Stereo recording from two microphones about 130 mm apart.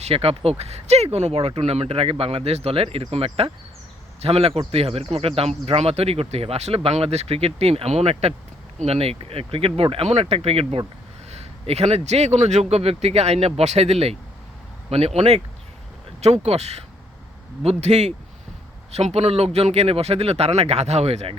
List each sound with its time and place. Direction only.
0.0 s a man's voice: 50° right (ahead or behind)